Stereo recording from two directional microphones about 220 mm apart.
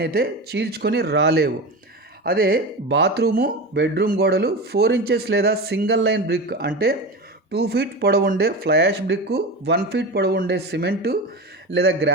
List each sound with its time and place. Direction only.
0.0 s speech: 45° right (ahead or behind)